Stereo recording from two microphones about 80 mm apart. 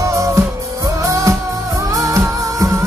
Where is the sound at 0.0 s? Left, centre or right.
Right.